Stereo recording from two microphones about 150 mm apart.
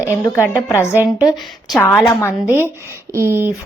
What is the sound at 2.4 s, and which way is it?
Speech, 15° right (ahead or behind).